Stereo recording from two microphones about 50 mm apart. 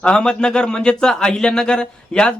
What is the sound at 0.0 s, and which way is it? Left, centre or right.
A man's voice, centre.